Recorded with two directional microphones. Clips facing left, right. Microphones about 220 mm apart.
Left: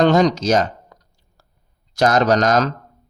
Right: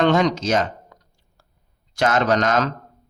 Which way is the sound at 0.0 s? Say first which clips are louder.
Left 3 dB; 40° left (ahead or behind).